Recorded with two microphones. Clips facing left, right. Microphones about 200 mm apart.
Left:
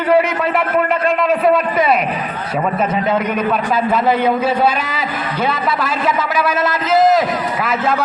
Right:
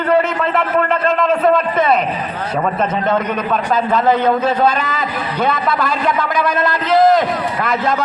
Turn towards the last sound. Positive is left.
turn(degrees=5)  # may be behind; listen again after turning